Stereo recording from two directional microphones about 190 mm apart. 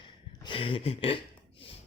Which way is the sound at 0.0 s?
25° left (ahead or behind).